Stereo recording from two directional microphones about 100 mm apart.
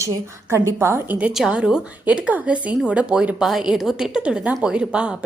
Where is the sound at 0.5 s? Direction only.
25° right (ahead or behind).